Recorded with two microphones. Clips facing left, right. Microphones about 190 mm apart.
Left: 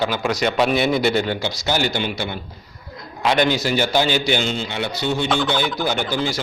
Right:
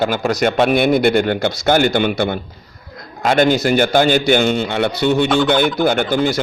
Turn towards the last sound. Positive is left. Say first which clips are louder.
# right 6 dB
turn(degrees=-55)  # may be behind; listen again after turning